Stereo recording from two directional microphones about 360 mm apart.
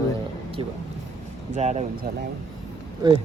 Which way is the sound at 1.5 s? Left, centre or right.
Centre.